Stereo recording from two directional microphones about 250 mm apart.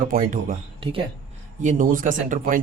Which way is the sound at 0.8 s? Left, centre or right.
Right.